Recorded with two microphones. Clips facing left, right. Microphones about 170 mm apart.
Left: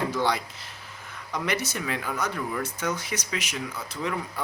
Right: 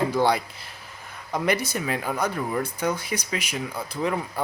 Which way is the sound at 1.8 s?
45° right (ahead or behind).